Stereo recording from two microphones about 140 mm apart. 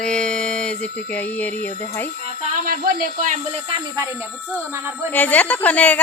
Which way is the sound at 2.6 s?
90° right.